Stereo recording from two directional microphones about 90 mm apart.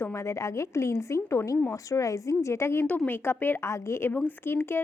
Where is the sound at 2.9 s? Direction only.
20° left (ahead or behind).